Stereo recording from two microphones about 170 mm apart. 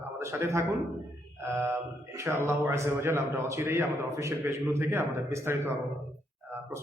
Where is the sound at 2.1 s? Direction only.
15° right (ahead or behind).